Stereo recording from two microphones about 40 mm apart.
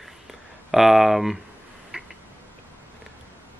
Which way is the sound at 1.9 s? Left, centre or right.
Right.